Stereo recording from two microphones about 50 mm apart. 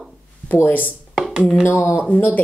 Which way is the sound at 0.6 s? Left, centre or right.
Left.